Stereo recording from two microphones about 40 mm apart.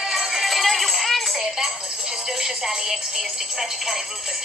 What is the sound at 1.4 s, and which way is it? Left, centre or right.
Speech, centre.